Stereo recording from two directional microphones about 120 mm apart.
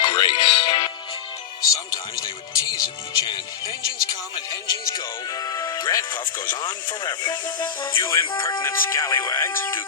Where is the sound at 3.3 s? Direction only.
35° left (ahead or behind).